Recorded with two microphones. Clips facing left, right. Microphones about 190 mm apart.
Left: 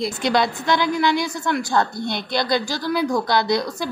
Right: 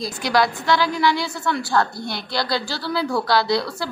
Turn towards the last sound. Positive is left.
turn(degrees=15)  # may be behind; listen again after turning